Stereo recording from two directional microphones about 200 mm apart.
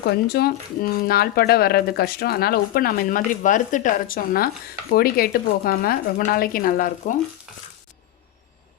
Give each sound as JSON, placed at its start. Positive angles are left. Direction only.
{"t": 0.3, "sound": "speech", "side_deg": 50}